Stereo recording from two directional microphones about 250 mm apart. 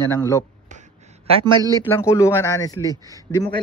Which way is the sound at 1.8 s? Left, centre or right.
Centre.